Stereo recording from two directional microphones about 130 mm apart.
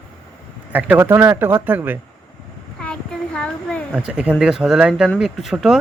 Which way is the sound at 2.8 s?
5° left (ahead or behind).